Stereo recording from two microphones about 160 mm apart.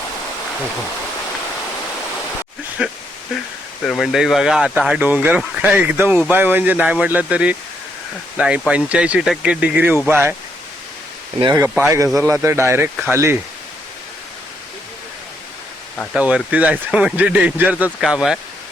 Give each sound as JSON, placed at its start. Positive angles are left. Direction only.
{"t": 2.8, "sound": "speech", "side_deg": -5}
{"t": 11.5, "sound": "speech", "side_deg": -10}
{"t": 16.1, "sound": "speech", "side_deg": -5}